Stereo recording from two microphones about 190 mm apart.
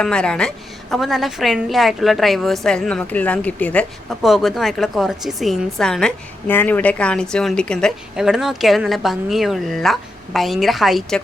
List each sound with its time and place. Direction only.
0.0 s a woman's voice: 5° left (ahead or behind)